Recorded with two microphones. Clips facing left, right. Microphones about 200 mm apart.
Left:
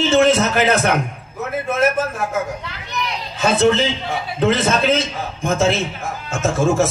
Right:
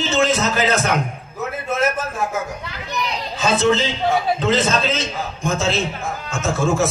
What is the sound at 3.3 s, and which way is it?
A man's voice, 60° left (ahead or behind).